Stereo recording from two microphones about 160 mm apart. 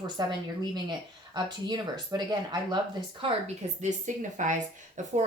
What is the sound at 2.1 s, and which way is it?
A woman's voice, 25° right (ahead or behind).